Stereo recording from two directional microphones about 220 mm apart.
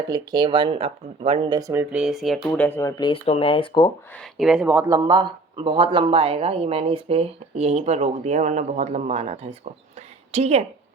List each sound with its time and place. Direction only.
0.1 s speech: 20° right (ahead or behind); by 3.1 s 10° left (ahead or behind)
3.1 s speech: 25° left (ahead or behind)
4.1 s speech: centre (ahead or behind); by 10.7 s 30° right (ahead or behind)